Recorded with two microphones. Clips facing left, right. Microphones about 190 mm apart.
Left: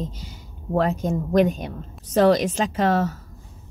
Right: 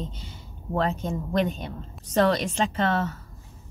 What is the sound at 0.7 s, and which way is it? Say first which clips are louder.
Speech: left 5 dB; 40° left (ahead or behind).